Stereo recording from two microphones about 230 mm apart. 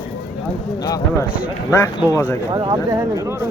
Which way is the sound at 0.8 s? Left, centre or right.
Centre.